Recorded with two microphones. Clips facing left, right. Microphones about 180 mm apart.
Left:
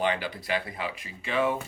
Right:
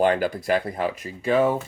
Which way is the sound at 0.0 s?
45° right (ahead or behind).